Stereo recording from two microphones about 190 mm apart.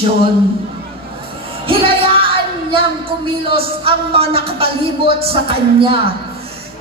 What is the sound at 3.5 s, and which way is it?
Speech, 30° right (ahead or behind).